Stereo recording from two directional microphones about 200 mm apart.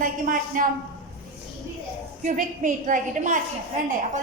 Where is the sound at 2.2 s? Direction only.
40° right (ahead or behind).